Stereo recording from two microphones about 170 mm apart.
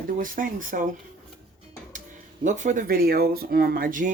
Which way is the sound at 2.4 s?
45° right (ahead or behind).